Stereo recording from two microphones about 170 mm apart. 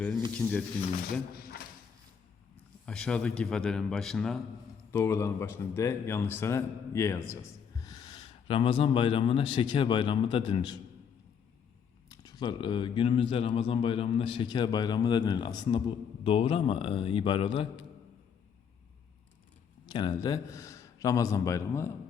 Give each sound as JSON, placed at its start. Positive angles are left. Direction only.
{"t": 2.8, "sound": "a man's voice", "side_deg": 5}
{"t": 4.9, "sound": "a man's voice", "side_deg": 15}
{"t": 12.0, "sound": "speech", "side_deg": 25}
{"t": 19.8, "sound": "a man's voice", "side_deg": 25}